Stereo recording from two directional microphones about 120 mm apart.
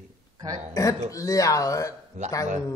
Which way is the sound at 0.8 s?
30° left (ahead or behind).